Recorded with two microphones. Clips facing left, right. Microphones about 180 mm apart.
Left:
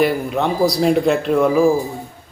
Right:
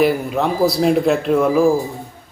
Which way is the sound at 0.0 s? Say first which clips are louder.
Right 1 dB; centre (ahead or behind).